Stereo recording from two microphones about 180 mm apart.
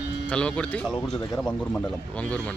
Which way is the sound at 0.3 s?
5° left (ahead or behind).